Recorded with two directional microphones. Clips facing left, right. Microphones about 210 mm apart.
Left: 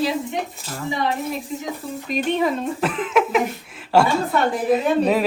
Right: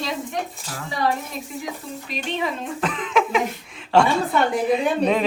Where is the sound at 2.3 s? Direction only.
50° left (ahead or behind).